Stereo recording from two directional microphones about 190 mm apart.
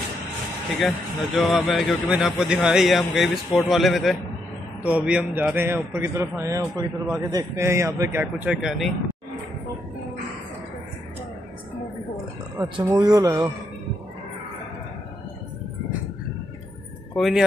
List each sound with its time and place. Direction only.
1.1 s a man's voice: centre (ahead or behind)
12.6 s speech: 25° right (ahead or behind)
17.1 s a man's voice: centre (ahead or behind)